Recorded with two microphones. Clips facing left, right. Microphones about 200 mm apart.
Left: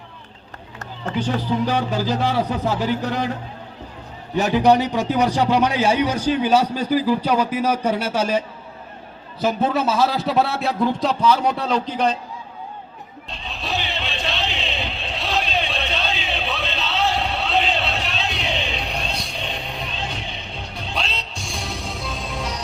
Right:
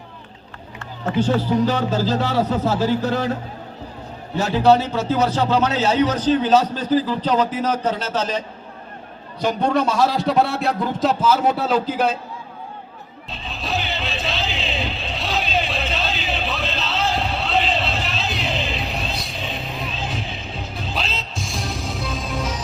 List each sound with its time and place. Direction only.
1.2 s speech: 15° left (ahead or behind)
4.4 s a man's voice: 15° left (ahead or behind); by 12.1 s 5° right (ahead or behind)
13.3 s music: centre (ahead or behind)